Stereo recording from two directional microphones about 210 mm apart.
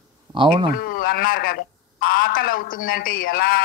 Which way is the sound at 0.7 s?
40° left (ahead or behind).